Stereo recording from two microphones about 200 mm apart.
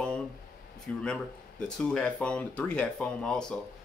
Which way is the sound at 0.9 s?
5° left (ahead or behind).